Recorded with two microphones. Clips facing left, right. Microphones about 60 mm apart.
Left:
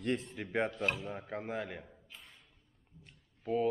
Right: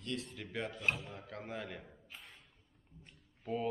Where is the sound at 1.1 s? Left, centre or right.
Centre.